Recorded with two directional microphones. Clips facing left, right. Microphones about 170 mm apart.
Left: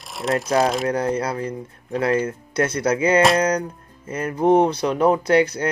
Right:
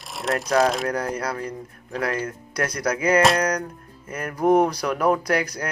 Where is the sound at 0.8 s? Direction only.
25° left (ahead or behind).